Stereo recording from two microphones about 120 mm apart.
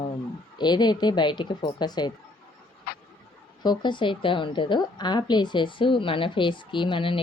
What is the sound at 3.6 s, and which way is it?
A woman's voice, 40° left (ahead or behind).